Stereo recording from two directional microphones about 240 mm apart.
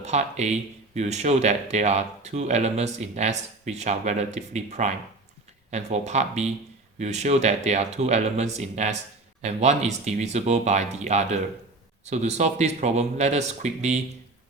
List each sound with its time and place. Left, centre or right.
0.0 s speech: right